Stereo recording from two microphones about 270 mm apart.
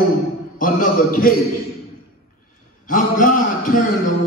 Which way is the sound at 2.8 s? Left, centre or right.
Left.